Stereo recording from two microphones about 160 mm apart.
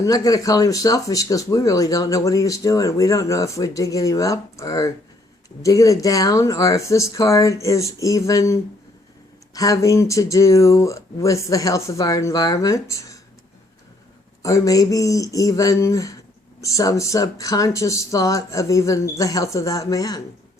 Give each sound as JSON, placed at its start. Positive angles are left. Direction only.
{"t": 0.0, "sound": "speech", "side_deg": 20}
{"t": 14.4, "sound": "speech", "side_deg": 20}